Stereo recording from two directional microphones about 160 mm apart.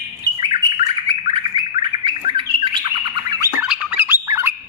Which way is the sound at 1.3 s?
30° right (ahead or behind).